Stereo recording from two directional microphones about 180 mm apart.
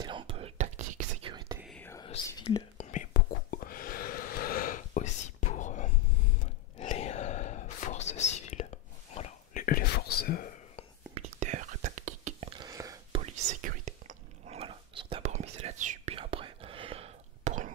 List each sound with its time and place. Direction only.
0.0 s whispering: 30° right (ahead or behind)
1.8 s whispering: 15° left (ahead or behind)
2.2 s speech: 20° left (ahead or behind)
2.8 s whispering: 45° left (ahead or behind)
11.1 s whispering: 40° right (ahead or behind)
12.4 s a sound: 25° right (ahead or behind)
13.2 s whispering: 40° right (ahead or behind)